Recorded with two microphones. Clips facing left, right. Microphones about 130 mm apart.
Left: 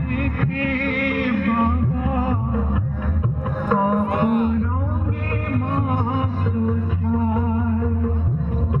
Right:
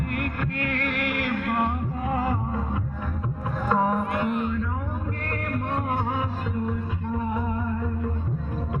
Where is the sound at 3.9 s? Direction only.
45° left (ahead or behind).